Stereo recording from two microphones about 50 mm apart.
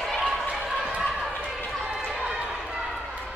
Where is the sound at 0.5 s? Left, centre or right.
Centre.